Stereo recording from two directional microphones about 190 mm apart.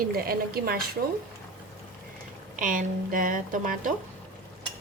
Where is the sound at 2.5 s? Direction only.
45° right (ahead or behind).